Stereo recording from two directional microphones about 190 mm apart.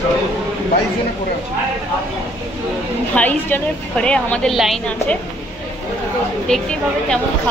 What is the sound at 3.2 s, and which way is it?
A woman's voice, 10° left (ahead or behind).